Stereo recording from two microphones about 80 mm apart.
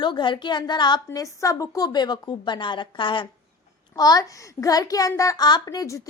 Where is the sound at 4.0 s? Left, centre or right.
Left.